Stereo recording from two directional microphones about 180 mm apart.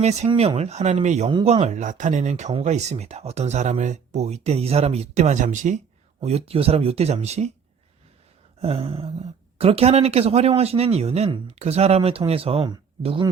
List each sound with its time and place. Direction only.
0.0 s speech: 40° right (ahead or behind)
8.6 s speech: 30° right (ahead or behind)